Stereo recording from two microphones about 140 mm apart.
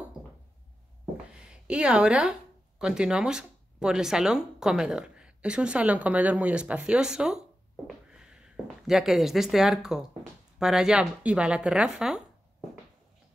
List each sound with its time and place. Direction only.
1.5 s a woman's voice: 5° right (ahead or behind)